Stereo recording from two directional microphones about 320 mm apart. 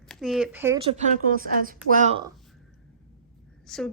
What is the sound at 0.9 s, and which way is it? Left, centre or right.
A woman's voice, right.